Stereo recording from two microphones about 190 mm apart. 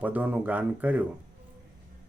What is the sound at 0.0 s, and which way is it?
Speech, 10° right (ahead or behind).